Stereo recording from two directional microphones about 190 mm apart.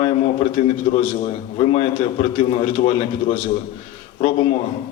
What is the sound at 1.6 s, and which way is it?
Speech, 30° left (ahead or behind).